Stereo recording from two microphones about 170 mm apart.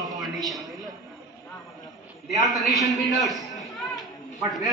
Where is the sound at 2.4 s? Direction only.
Centre (ahead or behind).